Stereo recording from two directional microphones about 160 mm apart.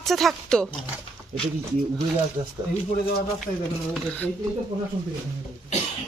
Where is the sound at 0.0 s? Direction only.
Centre (ahead or behind).